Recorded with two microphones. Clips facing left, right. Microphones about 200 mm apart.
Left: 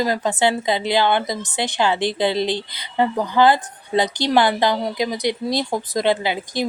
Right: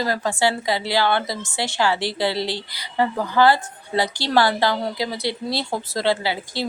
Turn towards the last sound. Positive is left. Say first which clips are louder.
# left 3 dB
turn(degrees=20)  # may be behind; listen again after turning